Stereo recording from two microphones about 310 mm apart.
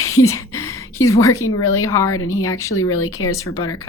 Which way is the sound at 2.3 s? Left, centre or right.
Centre.